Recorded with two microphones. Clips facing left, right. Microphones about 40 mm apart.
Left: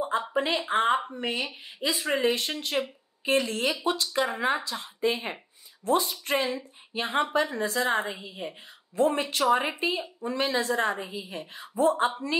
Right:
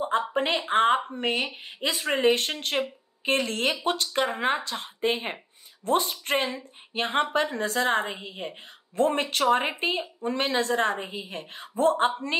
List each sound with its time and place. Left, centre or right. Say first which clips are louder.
0.3 s a woman's voice: right 1 dB; right
2.8 s speech: right 1 dB; centre
3.3 s a woman's voice: even; right